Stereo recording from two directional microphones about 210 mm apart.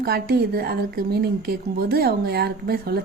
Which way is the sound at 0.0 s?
50° right (ahead or behind).